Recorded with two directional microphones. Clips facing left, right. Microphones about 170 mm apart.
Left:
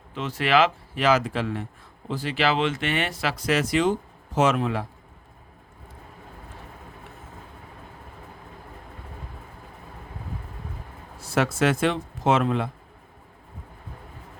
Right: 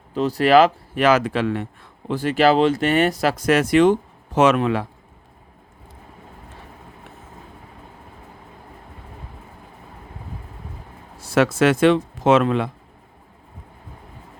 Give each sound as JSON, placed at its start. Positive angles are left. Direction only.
{"t": 0.1, "sound": "speech", "side_deg": -40}
{"t": 0.9, "sound": "speech", "side_deg": -60}
{"t": 2.0, "sound": "speech", "side_deg": -50}
{"t": 4.4, "sound": "speech", "side_deg": -75}
{"t": 11.2, "sound": "speech", "side_deg": -90}